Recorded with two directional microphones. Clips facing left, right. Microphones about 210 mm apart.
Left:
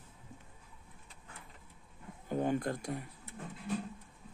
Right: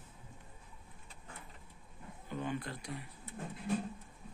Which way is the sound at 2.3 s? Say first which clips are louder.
Left 7 dB; 45° left (ahead or behind).